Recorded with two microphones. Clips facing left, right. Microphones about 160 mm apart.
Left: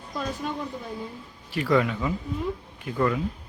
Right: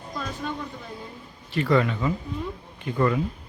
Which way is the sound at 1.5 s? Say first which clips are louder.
Right 1 dB; 5° left (ahead or behind).